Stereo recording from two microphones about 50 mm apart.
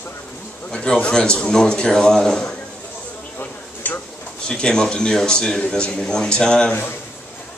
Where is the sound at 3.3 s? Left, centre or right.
Left.